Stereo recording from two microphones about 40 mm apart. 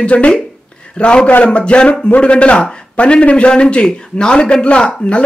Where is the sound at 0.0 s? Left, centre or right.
Left.